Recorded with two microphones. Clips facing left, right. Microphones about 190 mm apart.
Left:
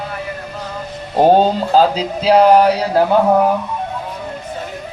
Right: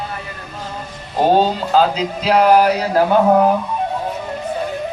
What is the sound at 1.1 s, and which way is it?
Music, 40° left (ahead or behind).